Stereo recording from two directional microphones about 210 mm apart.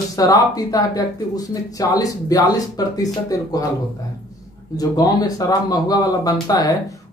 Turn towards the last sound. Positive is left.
turn(degrees=15)  # may be behind; listen again after turning